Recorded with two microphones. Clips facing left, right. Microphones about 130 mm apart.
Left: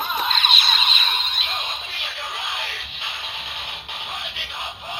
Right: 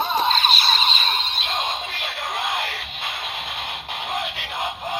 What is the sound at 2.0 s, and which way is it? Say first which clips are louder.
Music: right 5 dB; 45° right (ahead or behind).